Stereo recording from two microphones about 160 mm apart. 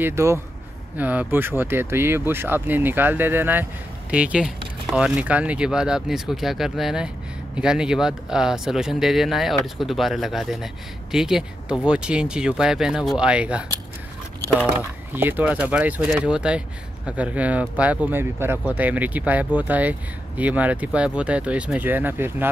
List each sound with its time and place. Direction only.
0.0 s speech: 15° right (ahead or behind)
14.8 s speech: 10° right (ahead or behind)